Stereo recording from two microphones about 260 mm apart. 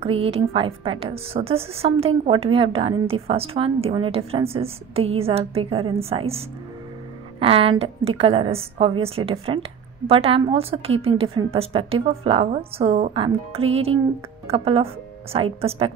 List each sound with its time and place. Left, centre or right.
0.0 s a woman's voice: right